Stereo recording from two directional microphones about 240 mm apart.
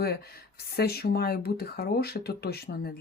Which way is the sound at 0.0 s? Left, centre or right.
Left.